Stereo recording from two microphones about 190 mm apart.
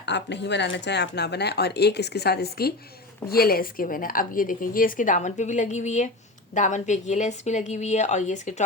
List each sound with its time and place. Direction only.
0.0 s a woman's voice: 65° left (ahead or behind); by 8.6 s 40° left (ahead or behind)